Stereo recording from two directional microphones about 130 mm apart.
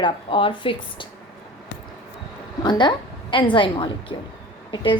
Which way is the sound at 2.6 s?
35° left (ahead or behind).